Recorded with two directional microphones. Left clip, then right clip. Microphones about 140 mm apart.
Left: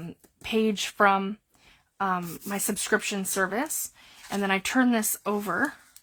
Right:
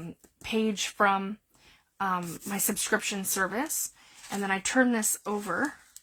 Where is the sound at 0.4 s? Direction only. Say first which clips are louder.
Left 3 dB; 35° left (ahead or behind).